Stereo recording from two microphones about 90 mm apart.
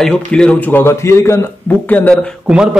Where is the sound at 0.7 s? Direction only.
30° left (ahead or behind).